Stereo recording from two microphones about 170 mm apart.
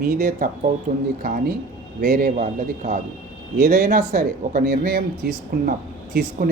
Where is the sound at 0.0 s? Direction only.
50° right (ahead or behind).